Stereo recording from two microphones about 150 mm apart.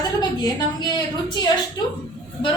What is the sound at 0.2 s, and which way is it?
A woman's voice, 30° left (ahead or behind).